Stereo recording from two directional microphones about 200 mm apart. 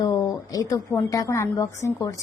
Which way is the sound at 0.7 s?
15° left (ahead or behind).